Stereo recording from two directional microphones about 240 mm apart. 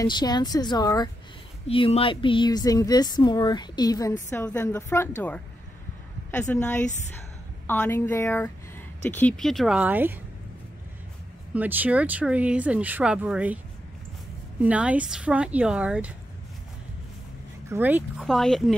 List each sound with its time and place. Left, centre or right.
0.0 s speech: centre
11.5 s speech: centre
14.6 s speech: centre
17.6 s speech: centre